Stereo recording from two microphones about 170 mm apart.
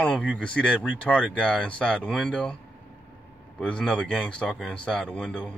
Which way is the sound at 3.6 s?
5° left (ahead or behind).